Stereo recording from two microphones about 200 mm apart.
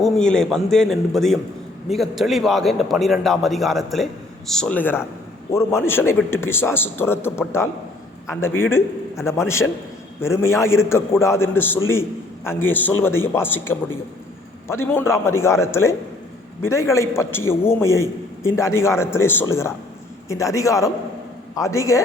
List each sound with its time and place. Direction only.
0.0 s a man's voice: 5° left (ahead or behind)